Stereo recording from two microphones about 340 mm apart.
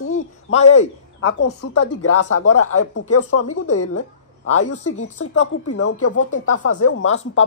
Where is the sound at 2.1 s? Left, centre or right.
Left.